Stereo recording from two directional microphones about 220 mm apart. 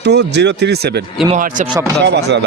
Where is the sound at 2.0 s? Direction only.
50° right (ahead or behind).